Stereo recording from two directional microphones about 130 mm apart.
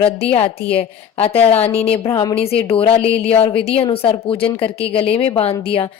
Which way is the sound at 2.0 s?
25° left (ahead or behind).